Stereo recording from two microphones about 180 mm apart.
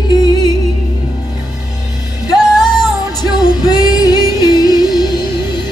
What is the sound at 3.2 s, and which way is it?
Music, 25° left (ahead or behind).